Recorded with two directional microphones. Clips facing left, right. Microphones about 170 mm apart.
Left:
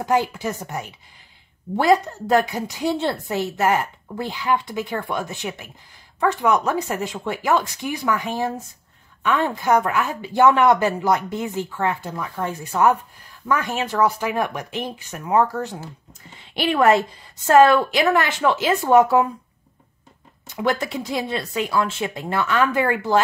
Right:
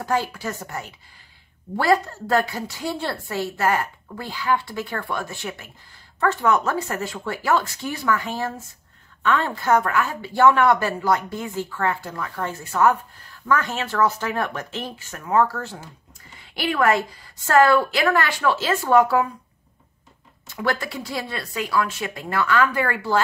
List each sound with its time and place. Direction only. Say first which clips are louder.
0.0 s a woman's voice: left 3 dB; 20° left (ahead or behind)
20.4 s a woman's voice: left 3 dB; 20° left (ahead or behind)